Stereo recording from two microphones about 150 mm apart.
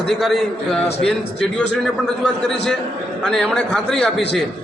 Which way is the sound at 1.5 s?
5° left (ahead or behind).